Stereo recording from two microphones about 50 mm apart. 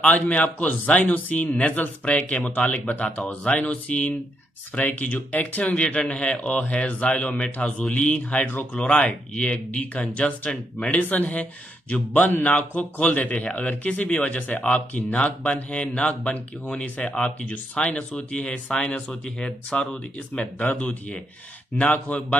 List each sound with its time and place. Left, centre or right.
0.3 s a man's voice: left